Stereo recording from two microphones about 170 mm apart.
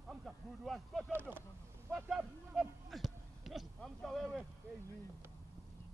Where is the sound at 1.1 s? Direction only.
15° right (ahead or behind).